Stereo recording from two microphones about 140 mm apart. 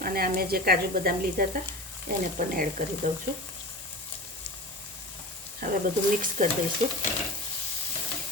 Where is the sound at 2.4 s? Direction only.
75° right (ahead or behind).